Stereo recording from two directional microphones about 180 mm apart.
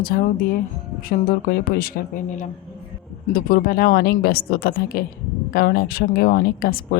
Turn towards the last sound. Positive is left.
turn(degrees=55)  # may be behind; listen again after turning